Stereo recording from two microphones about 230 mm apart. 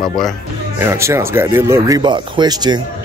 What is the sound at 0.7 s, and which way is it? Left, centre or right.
Speech, centre.